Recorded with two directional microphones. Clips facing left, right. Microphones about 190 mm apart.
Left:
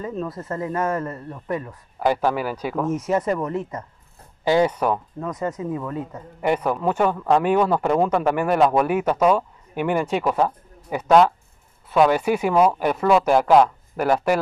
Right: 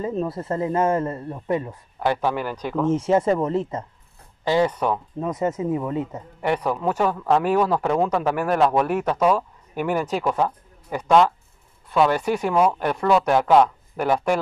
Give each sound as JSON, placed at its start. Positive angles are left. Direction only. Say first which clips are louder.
{"t": 0.0, "sound": "speech", "louder": "right 3 dB", "side_deg": -30}
{"t": 2.0, "sound": "speech", "louder": "left 2 dB", "side_deg": 5}
{"t": 2.9, "sound": "speech", "louder": "right 4 dB", "side_deg": -30}
{"t": 4.5, "sound": "speech", "louder": "left 2 dB", "side_deg": 5}
{"t": 5.2, "sound": "speech", "louder": "right 3 dB", "side_deg": -20}
{"t": 6.4, "sound": "speech", "louder": "left 2 dB", "side_deg": 5}
{"t": 6.9, "sound": "speech", "louder": "left 1 dB", "side_deg": -5}